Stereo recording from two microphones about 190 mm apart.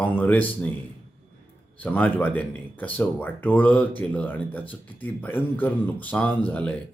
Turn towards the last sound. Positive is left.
turn(degrees=5)  # may be behind; listen again after turning